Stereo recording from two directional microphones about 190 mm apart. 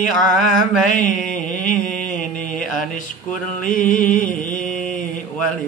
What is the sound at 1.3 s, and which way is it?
Mantra, 45° left (ahead or behind).